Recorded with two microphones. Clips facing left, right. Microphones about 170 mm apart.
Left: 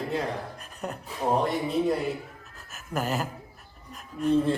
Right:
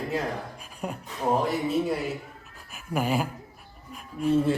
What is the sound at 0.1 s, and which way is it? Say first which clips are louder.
Speech: even; 5° right (ahead or behind).